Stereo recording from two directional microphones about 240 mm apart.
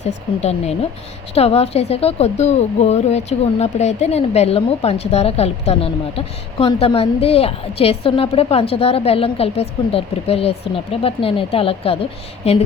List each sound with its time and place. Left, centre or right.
0.4 s a woman's voice: left